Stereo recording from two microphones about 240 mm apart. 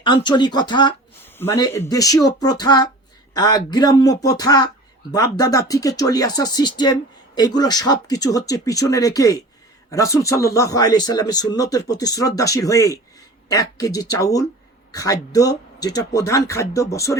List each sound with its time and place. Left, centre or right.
0.0 s speech: centre